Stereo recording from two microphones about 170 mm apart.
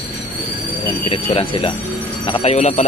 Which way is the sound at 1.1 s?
30° left (ahead or behind).